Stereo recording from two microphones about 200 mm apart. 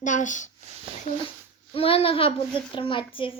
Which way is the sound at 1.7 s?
30° left (ahead or behind).